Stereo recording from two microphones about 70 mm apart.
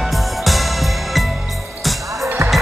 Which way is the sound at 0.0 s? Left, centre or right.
Centre.